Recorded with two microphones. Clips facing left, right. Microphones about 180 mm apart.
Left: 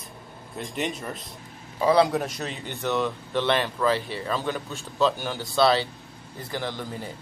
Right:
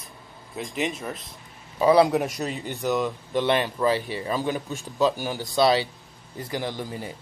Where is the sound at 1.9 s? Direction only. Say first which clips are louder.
Right 2 dB; 15° right (ahead or behind).